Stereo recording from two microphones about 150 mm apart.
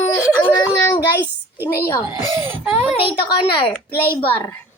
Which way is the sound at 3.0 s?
35° left (ahead or behind).